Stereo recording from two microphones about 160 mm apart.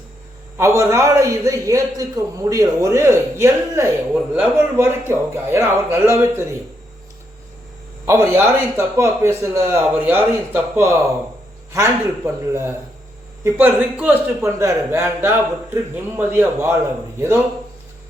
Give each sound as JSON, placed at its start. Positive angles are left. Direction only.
{"t": 0.5, "sound": "a man's voice", "side_deg": -15}
{"t": 8.0, "sound": "a man's voice", "side_deg": -15}